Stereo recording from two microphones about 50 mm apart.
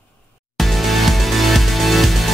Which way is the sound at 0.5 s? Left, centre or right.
Centre.